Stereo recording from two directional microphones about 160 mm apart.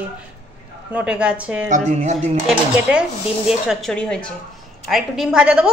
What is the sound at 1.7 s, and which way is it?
Speech, 45° right (ahead or behind).